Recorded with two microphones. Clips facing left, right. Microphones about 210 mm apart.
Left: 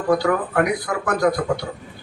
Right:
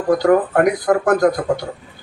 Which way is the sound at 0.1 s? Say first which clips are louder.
Right 5 dB; 45° right (ahead or behind).